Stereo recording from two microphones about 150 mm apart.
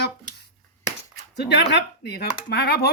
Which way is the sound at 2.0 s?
90° left.